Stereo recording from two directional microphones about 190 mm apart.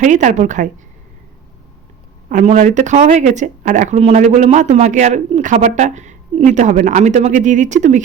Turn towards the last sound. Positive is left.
turn(degrees=-40)  # may be behind; listen again after turning